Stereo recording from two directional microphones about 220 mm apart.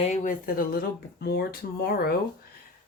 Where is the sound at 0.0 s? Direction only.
35° left (ahead or behind).